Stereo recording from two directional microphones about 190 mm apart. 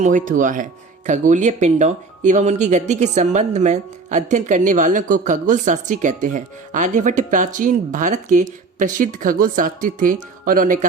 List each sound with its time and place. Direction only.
0.0 s speech: 45° right (ahead or behind)